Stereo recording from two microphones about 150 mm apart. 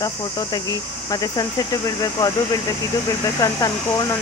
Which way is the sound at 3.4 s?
25° left (ahead or behind).